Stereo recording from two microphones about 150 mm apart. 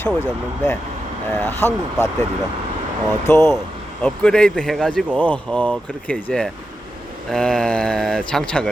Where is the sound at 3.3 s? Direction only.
15° left (ahead or behind).